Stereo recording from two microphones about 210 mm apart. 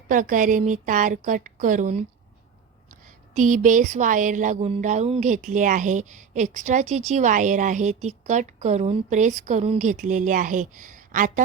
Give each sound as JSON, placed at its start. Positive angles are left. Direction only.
{"t": 0.1, "sound": "speech", "side_deg": -40}
{"t": 3.3, "sound": "speech", "side_deg": -35}